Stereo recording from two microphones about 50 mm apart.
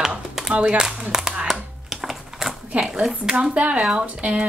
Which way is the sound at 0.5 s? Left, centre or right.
Centre.